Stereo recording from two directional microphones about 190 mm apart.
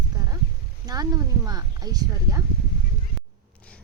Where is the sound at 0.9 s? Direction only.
20° right (ahead or behind).